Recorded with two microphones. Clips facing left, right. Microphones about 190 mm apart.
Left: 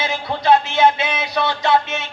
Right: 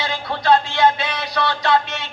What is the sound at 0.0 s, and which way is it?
Music, 20° left (ahead or behind).